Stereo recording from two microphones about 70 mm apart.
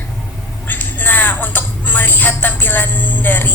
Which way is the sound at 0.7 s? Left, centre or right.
Left.